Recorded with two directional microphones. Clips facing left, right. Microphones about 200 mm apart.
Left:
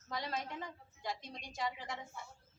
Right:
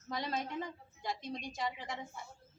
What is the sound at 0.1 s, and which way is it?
A woman's voice, 20° right (ahead or behind).